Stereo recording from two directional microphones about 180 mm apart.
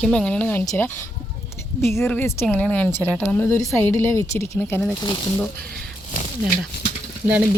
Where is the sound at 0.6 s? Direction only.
20° left (ahead or behind).